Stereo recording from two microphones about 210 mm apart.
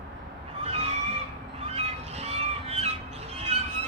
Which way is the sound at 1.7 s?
30° right (ahead or behind).